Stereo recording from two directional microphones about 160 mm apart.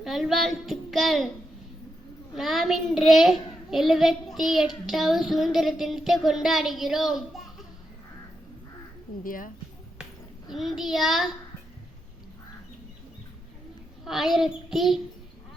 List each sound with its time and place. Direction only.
0.0 s a child's voice: centre (ahead or behind)
2.3 s a child's voice: centre (ahead or behind)
9.2 s speech: 60° left (ahead or behind)
10.5 s a child's voice: centre (ahead or behind)
14.0 s a child's voice: centre (ahead or behind)